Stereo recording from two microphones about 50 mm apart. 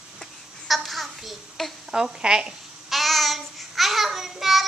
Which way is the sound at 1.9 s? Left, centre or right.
Centre.